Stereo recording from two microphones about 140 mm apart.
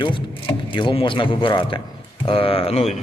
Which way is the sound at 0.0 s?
35° left (ahead or behind).